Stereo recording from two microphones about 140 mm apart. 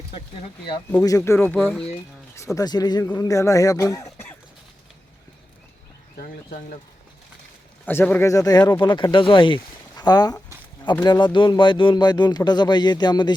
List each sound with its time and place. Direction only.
1.0 s speech: 20° left (ahead or behind)
6.1 s speech: 75° left (ahead or behind)
7.9 s speech: 15° left (ahead or behind); by 13.3 s 30° left (ahead or behind)